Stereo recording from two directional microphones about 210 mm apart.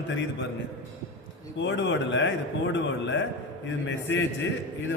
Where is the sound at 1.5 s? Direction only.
60° left (ahead or behind).